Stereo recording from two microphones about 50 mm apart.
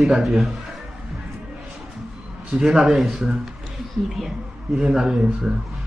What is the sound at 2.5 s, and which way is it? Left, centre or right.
Speech, centre.